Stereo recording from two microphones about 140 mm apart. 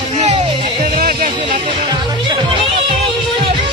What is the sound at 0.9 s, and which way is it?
Music, 75° right (ahead or behind).